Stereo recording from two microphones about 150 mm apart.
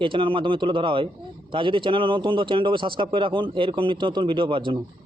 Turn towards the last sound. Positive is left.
turn(degrees=-35)  # may be behind; listen again after turning